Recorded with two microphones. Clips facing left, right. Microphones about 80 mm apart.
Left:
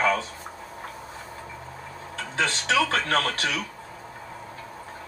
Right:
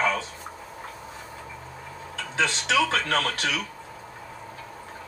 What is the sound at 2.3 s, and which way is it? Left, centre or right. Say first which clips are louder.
Speech: even; left.